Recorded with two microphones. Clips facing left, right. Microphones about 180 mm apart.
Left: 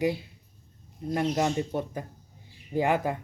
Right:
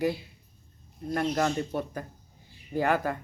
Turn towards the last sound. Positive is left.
turn(degrees=20)  # may be behind; listen again after turning